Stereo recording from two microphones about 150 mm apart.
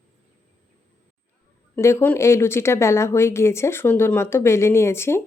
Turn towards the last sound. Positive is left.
turn(degrees=15)  # may be behind; listen again after turning